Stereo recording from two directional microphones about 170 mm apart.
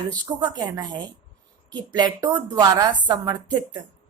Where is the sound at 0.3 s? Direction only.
25° right (ahead or behind).